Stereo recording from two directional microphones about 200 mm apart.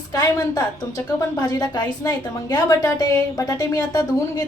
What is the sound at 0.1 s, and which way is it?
A woman's voice, 20° left (ahead or behind).